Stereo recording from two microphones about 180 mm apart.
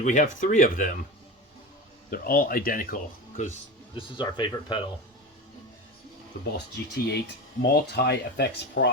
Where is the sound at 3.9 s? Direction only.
25° left (ahead or behind).